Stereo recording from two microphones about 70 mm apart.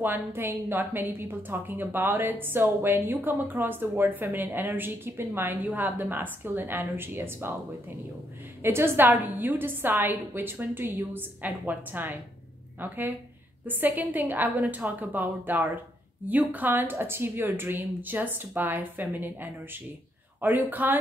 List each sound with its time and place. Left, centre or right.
0.0 s a woman's voice: right
8.6 s a woman's voice: right